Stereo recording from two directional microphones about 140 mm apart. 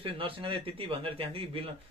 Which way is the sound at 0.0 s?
40° right (ahead or behind).